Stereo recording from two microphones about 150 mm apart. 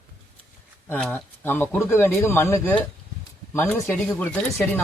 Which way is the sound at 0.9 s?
10° left (ahead or behind).